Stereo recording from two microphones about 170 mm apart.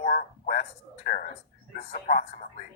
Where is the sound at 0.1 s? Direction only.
55° left (ahead or behind).